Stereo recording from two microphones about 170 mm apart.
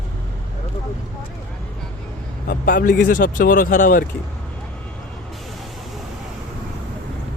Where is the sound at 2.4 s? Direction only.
60° left (ahead or behind).